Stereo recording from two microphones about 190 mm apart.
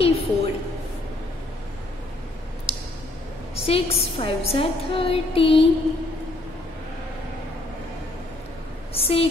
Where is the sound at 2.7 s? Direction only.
30° left (ahead or behind).